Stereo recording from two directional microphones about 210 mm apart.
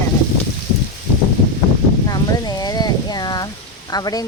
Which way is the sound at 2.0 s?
20° left (ahead or behind).